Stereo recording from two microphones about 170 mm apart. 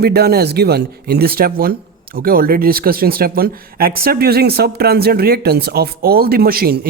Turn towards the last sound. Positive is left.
turn(degrees=-65)  # may be behind; listen again after turning